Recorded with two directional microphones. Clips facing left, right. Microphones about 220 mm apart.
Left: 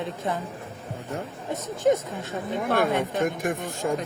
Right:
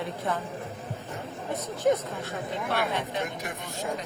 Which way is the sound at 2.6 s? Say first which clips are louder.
Left 7 dB; 50° left (ahead or behind).